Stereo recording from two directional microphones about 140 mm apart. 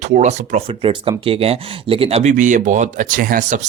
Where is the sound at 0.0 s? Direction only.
55° right (ahead or behind).